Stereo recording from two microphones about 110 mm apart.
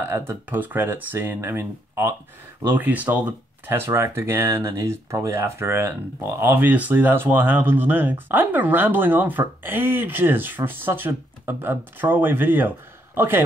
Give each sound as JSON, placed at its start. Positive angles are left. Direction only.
{"t": 0.0, "sound": "speech", "side_deg": -20}